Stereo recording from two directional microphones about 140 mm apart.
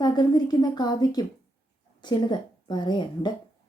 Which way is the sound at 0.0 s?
30° left (ahead or behind).